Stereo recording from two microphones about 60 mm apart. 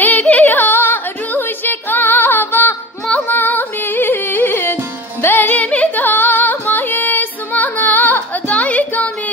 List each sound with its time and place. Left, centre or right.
0.0 s music: left